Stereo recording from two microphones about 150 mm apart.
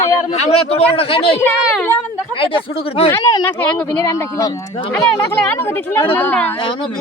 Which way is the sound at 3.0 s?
25° left (ahead or behind).